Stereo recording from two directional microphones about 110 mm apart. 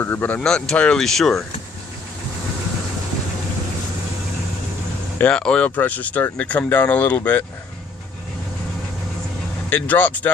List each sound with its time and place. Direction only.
0.0 s speech: 20° left (ahead or behind)
5.1 s speech: 10° left (ahead or behind)
9.6 s speech: 15° left (ahead or behind)